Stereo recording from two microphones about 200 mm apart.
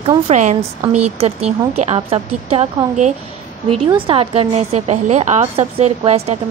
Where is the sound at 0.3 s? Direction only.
35° right (ahead or behind).